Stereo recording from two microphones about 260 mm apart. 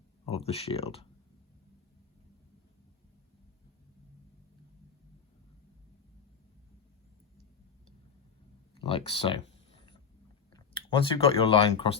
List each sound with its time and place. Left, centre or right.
0.3 s speech: left
8.7 s speech: left
10.5 s speech: centre